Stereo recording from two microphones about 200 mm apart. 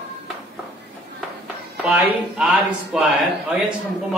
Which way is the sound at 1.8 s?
5° right (ahead or behind).